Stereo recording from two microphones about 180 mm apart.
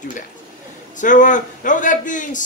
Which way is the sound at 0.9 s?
45° left (ahead or behind).